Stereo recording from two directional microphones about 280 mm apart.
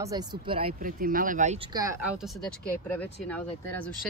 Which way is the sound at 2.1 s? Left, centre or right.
Centre.